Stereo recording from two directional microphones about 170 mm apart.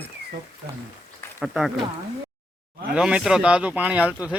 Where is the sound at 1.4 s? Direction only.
5° right (ahead or behind).